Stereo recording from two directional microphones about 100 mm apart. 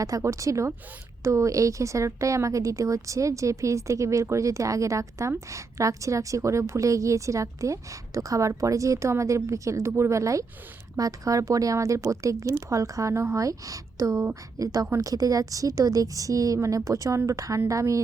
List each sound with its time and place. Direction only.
0.0 s a woman's voice: 35° right (ahead or behind)